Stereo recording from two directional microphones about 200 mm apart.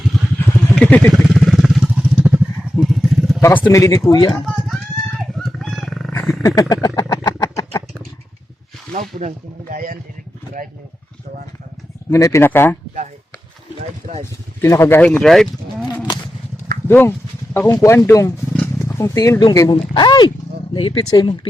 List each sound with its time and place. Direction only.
0.3 s vehicle: 10° left (ahead or behind); by 2.4 s 5° right (ahead or behind)
2.8 s motorcycle: centre (ahead or behind)
3.4 s speech: 10° left (ahead or behind)
4.4 s wild animals: centre (ahead or behind)
6.6 s speech: 15° left (ahead or behind)
7.2 s a sound: 20° left (ahead or behind)
8.9 s speech: 40° right (ahead or behind)
12.1 s speech: 15° left (ahead or behind)
14.6 s speech: 15° left (ahead or behind)
16.9 s speech: 10° left (ahead or behind)